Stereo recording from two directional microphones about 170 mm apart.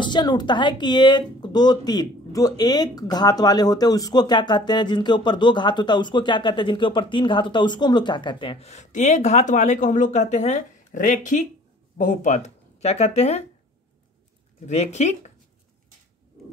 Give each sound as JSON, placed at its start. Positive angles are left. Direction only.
{"t": 0.0, "sound": "speech", "side_deg": 25}
{"t": 14.7, "sound": "speech", "side_deg": 40}